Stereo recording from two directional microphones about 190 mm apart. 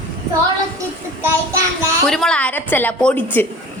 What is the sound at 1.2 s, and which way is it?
Child singing, 15° right (ahead or behind).